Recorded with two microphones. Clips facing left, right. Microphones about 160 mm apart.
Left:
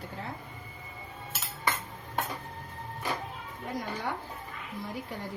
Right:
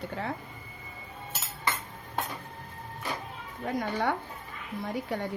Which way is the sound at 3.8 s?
70° right (ahead or behind).